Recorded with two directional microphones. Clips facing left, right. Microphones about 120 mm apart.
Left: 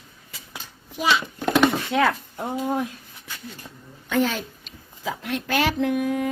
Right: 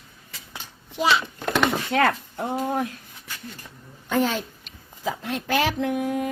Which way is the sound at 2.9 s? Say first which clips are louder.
Even; 15° left (ahead or behind).